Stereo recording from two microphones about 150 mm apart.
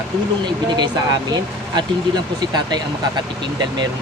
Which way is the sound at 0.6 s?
30° right (ahead or behind).